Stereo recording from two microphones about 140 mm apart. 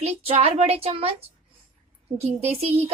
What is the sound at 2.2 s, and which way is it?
Speech, 50° right (ahead or behind).